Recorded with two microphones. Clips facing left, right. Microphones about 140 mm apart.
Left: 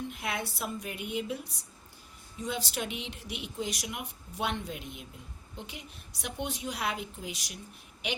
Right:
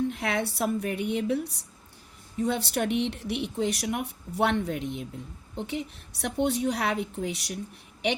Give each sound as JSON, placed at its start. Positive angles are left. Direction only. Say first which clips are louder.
{"t": 0.1, "sound": "a woman's voice", "louder": "right 7 dB", "side_deg": -70}